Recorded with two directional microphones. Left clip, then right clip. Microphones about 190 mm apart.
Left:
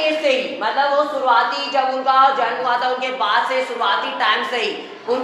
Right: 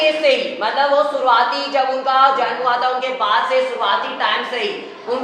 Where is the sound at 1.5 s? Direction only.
30° left (ahead or behind).